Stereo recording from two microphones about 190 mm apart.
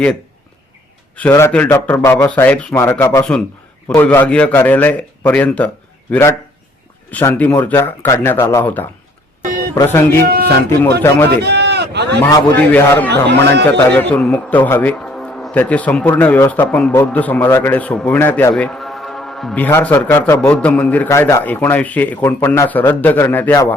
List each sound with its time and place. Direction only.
1.1 s a man's voice: 10° left (ahead or behind)
11.4 s speech: 60° right (ahead or behind)
12.2 s a man's voice: 10° left (ahead or behind)
13.2 s a man's voice: 65° right (ahead or behind)
13.7 s a man's voice: 10° left (ahead or behind)